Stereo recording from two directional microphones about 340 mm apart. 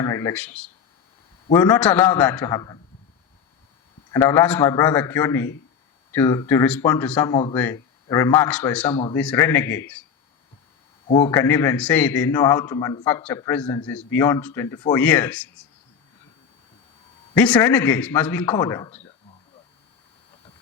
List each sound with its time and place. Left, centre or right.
0.0 s a man's voice: centre
4.1 s a man's voice: centre
11.1 s speech: centre
17.3 s a man's voice: centre